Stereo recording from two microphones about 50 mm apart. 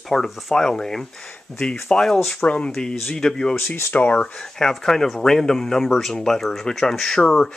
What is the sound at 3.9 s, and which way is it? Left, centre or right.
Speech, left.